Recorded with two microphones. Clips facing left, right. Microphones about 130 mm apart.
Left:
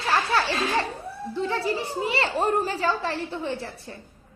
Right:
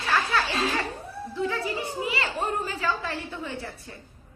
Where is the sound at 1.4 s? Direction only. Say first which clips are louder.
Left 2 dB; 35° left (ahead or behind).